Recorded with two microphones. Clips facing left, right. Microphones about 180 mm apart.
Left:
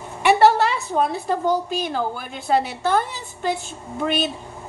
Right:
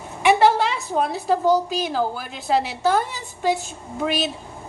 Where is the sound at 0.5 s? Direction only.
Centre (ahead or behind).